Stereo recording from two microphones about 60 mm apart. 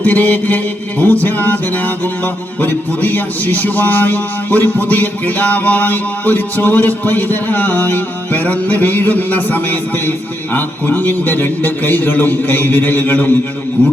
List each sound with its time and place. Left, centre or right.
0.0 s music: left